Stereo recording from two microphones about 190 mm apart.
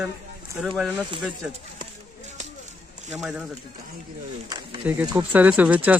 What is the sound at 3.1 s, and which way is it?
Speech, 5° right (ahead or behind).